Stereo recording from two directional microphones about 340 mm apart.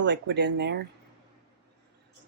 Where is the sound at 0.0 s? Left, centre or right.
Right.